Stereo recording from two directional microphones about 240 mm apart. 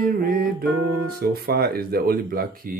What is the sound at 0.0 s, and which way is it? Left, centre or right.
Speech, right.